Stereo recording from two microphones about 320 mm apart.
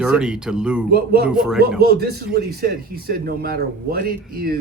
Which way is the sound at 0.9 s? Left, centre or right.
Right.